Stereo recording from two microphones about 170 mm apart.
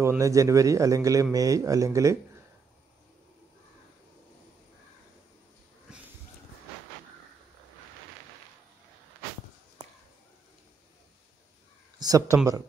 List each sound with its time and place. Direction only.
0.0 s a man's voice: 20° right (ahead or behind)
5.9 s a sound: 5° right (ahead or behind)
12.0 s speech: 20° right (ahead or behind)